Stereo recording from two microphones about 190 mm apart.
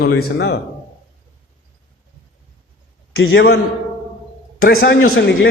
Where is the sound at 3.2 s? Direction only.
60° left (ahead or behind).